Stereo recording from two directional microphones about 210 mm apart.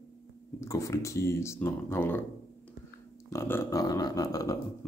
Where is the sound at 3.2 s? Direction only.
10° left (ahead or behind).